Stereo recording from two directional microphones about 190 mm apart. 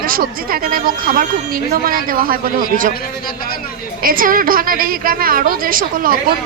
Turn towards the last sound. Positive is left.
turn(degrees=-50)  # may be behind; listen again after turning